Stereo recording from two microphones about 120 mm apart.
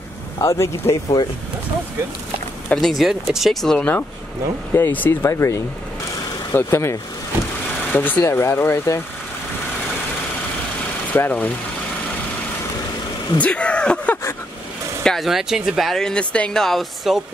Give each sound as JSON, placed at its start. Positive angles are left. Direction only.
{"t": 0.4, "sound": "speech", "side_deg": 25}
{"t": 2.7, "sound": "speech", "side_deg": 0}
{"t": 11.1, "sound": "speech", "side_deg": 15}
{"t": 13.4, "sound": "speech", "side_deg": 10}
{"t": 15.0, "sound": "speech", "side_deg": 0}